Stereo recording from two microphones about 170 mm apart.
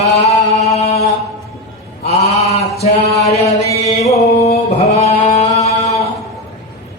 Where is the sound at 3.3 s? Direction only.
40° left (ahead or behind).